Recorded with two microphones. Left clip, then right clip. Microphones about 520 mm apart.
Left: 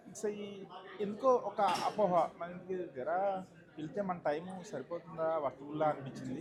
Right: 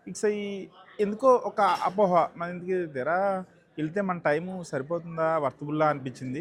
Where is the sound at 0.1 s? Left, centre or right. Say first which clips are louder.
Right 12 dB; right.